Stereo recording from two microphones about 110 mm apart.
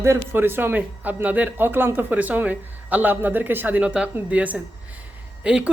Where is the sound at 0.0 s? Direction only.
20° right (ahead or behind).